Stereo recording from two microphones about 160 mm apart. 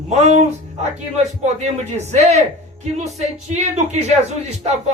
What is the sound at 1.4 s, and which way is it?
Speech, 45° right (ahead or behind).